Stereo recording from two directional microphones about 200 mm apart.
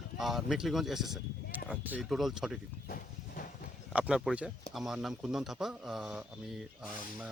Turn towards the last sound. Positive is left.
turn(degrees=0)  # may be behind; listen again after turning